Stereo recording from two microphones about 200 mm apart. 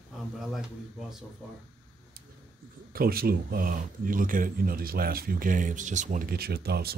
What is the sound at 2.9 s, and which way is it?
Speech, 50° right (ahead or behind).